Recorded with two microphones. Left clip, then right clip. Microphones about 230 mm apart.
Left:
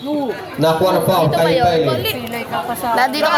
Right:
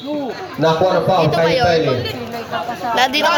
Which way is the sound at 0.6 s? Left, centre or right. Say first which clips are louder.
Even; left.